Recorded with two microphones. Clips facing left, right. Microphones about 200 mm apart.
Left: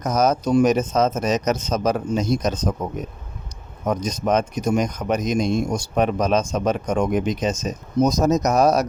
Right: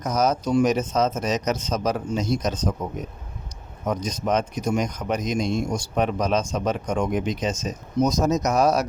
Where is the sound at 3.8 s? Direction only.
45° left (ahead or behind).